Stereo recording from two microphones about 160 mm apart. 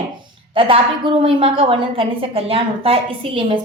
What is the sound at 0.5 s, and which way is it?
A woman's voice, 35° right (ahead or behind).